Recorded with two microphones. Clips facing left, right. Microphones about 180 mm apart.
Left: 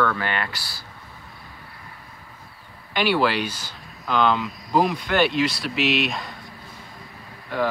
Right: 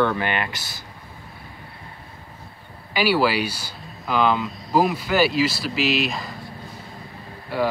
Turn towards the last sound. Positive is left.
turn(degrees=-10)  # may be behind; listen again after turning